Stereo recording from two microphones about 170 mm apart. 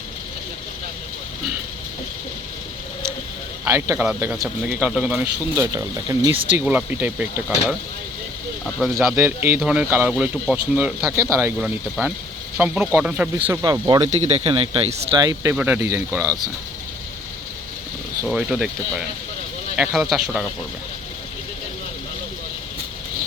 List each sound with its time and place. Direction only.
3.6 s speech: 15° right (ahead or behind)
5.7 s speech: 20° right (ahead or behind)
6.7 s speech: 10° right (ahead or behind)
9.0 s speech: 10° right (ahead or behind)
11.6 s speech: 5° right (ahead or behind)
13.5 s speech: 15° right (ahead or behind)
14.0 s speech: 40° right (ahead or behind)
15.2 s speech: 20° right (ahead or behind)
18.3 s speech: 5° right (ahead or behind)